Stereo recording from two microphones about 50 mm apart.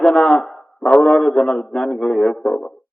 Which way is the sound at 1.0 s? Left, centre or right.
Centre.